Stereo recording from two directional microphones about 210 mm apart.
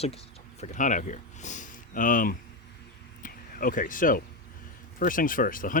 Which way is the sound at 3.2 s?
40° left (ahead or behind).